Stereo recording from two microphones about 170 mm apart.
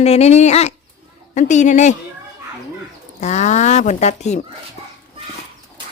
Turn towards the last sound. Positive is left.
turn(degrees=40)  # may be behind; listen again after turning